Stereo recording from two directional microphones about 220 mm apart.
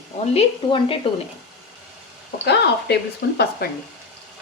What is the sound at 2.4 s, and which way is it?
Speech, 50° left (ahead or behind).